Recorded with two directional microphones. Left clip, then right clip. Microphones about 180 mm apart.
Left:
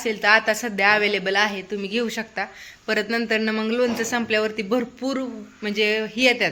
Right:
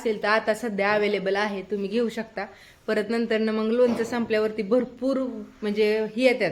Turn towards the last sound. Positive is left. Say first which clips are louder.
# left 2 dB
turn(degrees=-5)  # may be behind; listen again after turning